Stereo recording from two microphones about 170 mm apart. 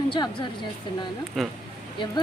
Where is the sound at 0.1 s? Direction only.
25° left (ahead or behind).